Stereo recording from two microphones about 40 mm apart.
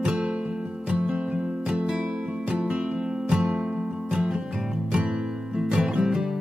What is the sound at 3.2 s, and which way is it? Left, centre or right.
Music, right.